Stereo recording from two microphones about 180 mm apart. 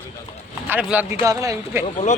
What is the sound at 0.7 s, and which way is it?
Speech, 10° right (ahead or behind).